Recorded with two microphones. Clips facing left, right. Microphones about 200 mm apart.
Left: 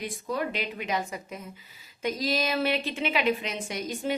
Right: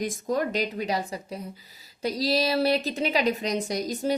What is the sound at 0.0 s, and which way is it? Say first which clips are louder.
A woman's voice: right 4 dB; 45° right (ahead or behind).